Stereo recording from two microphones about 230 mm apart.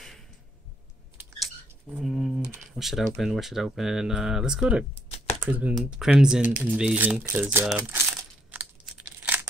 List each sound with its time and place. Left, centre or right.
2.0 s typing: centre
3.2 s speech: centre
5.1 s computer keyboard: left
5.4 s speech: centre
8.2 s coin: centre